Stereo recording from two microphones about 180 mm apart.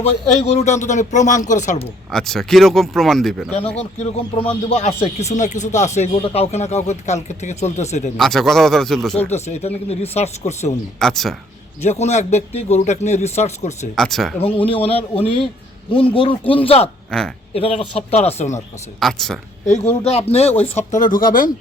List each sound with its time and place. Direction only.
0.0 s speech: 35° left (ahead or behind)
2.0 s speech: centre (ahead or behind)
3.8 s speech: 35° left (ahead or behind)
8.2 s speech: centre (ahead or behind)
9.3 s speech: 35° left (ahead or behind)
11.0 s speech: centre (ahead or behind)
11.8 s speech: 40° left (ahead or behind)
13.9 s speech: centre (ahead or behind)
14.3 s speech: 30° left (ahead or behind)
17.1 s speech: 5° left (ahead or behind)
17.5 s speech: 30° left (ahead or behind)
18.9 s speech: centre (ahead or behind)
19.6 s speech: 40° left (ahead or behind)